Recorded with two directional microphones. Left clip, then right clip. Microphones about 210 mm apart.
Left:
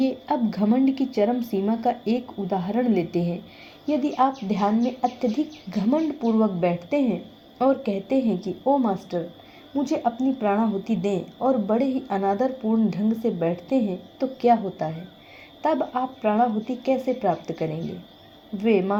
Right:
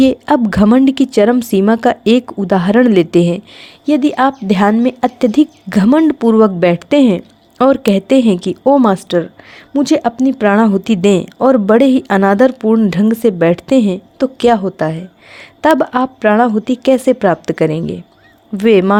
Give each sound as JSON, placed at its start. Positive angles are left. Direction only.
{"t": 0.0, "sound": "speech", "side_deg": -45}